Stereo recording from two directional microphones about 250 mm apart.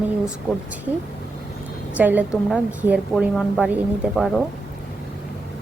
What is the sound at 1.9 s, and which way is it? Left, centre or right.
A woman's voice, centre.